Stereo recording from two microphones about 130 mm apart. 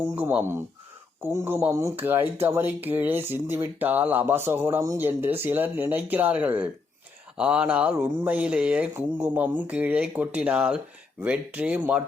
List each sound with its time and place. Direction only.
0.2 s speech: 15° right (ahead or behind)